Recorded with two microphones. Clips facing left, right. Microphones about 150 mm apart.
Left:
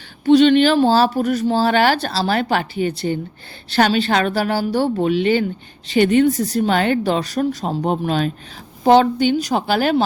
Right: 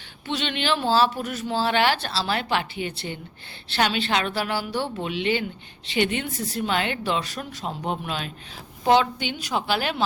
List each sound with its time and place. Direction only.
0.3 s speech: 40° left (ahead or behind)